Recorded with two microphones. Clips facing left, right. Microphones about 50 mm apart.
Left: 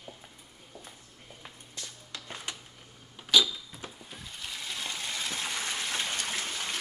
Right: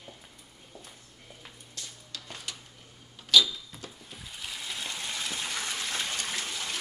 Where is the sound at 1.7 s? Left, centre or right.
Centre.